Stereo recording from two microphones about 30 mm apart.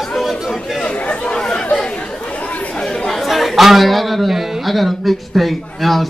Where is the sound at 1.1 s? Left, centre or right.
Left.